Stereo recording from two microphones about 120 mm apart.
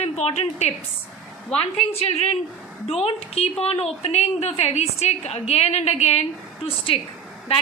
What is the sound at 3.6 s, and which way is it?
A woman's voice, 60° left (ahead or behind).